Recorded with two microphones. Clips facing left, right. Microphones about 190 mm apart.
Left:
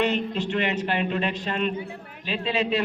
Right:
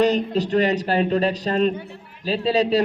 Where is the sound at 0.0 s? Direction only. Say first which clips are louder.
Right 6 dB; 40° right (ahead or behind).